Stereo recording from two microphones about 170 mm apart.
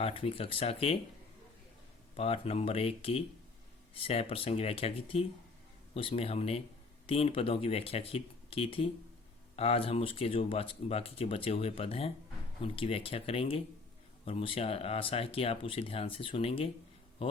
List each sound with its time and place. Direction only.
0.0 s speech: 35° left (ahead or behind)
2.1 s speech: 35° left (ahead or behind)